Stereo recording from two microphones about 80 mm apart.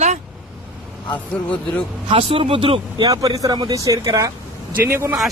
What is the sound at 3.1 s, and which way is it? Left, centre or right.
Speech, right.